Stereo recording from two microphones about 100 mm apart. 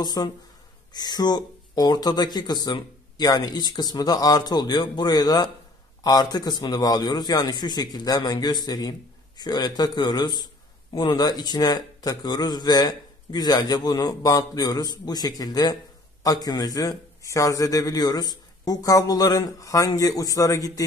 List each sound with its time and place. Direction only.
0.0 s a man's voice: 40° left (ahead or behind)